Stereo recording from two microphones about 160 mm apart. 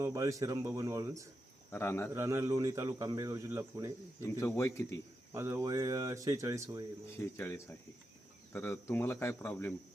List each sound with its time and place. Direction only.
0.0 s speech: 20° right (ahead or behind)
1.7 s speech: 15° left (ahead or behind)
2.1 s speech: 15° right (ahead or behind)
4.2 s speech: 15° left (ahead or behind)
5.3 s speech: 15° right (ahead or behind)
7.2 s speech: 15° left (ahead or behind)